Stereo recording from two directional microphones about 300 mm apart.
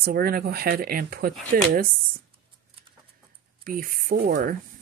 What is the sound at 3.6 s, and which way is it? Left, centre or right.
Speech, right.